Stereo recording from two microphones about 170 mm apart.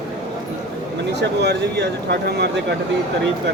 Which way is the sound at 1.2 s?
80° right.